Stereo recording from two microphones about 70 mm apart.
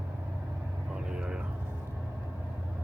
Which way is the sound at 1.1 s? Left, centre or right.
Centre.